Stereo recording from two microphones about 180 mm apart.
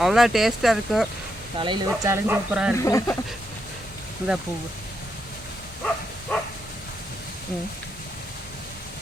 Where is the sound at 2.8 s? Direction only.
15° left (ahead or behind).